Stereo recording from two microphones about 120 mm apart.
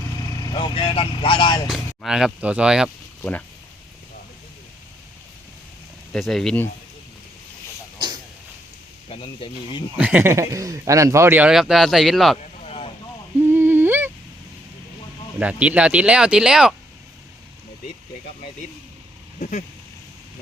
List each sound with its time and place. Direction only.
0.4 s speech: 40° left (ahead or behind)
2.0 s speech: 5° right (ahead or behind)
3.2 s speech: 10° left (ahead or behind)
6.1 s speech: centre (ahead or behind)
9.0 s speech: 50° left (ahead or behind)
10.0 s speech: 15° right (ahead or behind)
11.5 s speech: centre (ahead or behind)
12.4 s a sound: 60° left (ahead or behind)
13.4 s humming: 20° right (ahead or behind)
15.4 s speech: 10° right (ahead or behind)